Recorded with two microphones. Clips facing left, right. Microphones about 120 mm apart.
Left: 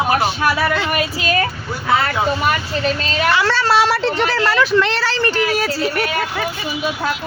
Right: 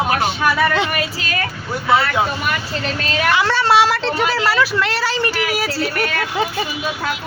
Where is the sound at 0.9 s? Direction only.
20° left (ahead or behind).